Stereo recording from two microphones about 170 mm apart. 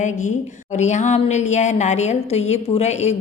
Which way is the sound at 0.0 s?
45° left (ahead or behind).